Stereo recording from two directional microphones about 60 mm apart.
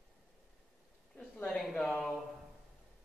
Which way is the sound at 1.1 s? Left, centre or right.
Centre.